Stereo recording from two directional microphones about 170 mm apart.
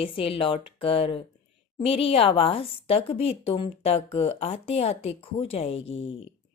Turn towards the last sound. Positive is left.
turn(degrees=90)